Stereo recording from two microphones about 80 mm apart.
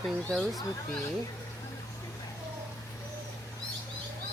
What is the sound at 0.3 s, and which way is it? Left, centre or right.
Speech, centre.